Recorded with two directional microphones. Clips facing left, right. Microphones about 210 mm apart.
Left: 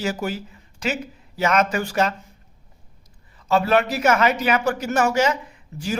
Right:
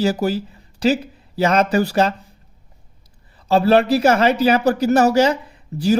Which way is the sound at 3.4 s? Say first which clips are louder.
Right 5 dB; 35° right (ahead or behind).